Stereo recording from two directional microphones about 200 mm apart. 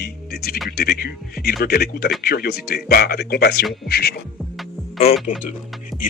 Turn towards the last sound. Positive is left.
turn(degrees=0)  # may be behind; listen again after turning